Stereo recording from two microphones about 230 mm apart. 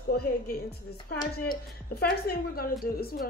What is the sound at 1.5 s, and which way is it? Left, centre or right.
A woman's voice, left.